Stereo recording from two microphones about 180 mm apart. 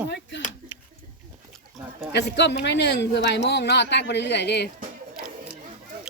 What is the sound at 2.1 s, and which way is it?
Speech, 70° left (ahead or behind).